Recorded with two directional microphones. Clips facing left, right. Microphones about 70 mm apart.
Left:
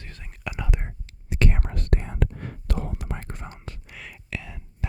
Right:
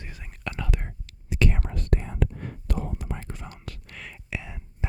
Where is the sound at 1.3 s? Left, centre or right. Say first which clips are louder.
Even; left.